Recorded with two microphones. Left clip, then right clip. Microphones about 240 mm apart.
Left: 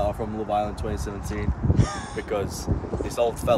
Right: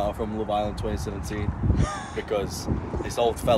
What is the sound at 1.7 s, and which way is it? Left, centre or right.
Speech, centre.